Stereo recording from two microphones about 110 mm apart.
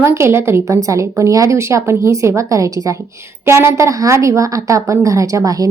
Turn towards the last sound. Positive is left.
turn(degrees=-30)  # may be behind; listen again after turning